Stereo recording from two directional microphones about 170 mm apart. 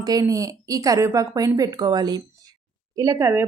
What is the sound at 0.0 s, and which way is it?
A woman's voice, 20° right (ahead or behind).